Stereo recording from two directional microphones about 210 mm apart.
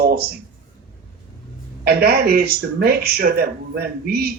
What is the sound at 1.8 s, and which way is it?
Speech, 50° right (ahead or behind).